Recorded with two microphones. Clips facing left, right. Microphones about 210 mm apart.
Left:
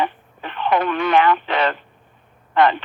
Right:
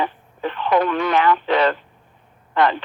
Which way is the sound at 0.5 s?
65° left (ahead or behind).